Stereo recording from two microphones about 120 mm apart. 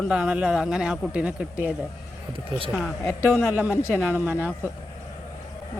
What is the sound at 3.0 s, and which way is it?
Speech, 25° left (ahead or behind).